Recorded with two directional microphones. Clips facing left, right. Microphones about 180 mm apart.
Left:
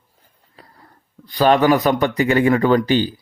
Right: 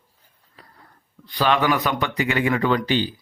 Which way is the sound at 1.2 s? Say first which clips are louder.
Left 6 dB; 40° left (ahead or behind).